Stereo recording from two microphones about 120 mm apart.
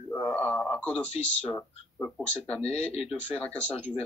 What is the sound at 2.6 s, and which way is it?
Speech, 60° left (ahead or behind).